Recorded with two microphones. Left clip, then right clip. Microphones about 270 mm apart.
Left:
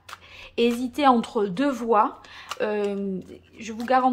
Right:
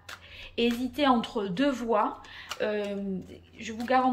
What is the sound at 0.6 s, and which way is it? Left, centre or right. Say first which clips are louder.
A woman's voice: left 5 dB; centre.